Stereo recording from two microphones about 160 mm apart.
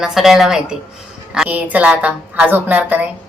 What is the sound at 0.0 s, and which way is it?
Speech, centre (ahead or behind).